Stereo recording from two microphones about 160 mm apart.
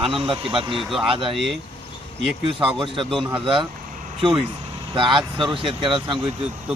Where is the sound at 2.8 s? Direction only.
30° right (ahead or behind).